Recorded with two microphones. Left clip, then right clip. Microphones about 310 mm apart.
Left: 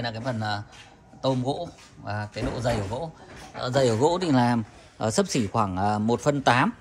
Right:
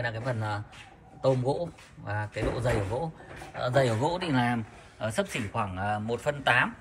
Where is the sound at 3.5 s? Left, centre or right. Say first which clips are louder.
Left 3 dB; centre.